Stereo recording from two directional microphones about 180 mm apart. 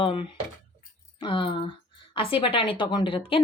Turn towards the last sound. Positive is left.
turn(degrees=30)  # may be behind; listen again after turning